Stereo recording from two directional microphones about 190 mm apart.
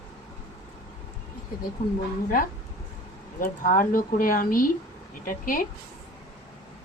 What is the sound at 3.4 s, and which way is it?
Speech, 45° left (ahead or behind).